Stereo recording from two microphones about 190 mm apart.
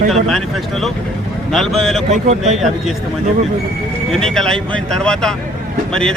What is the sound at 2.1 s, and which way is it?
Speech, 35° right (ahead or behind).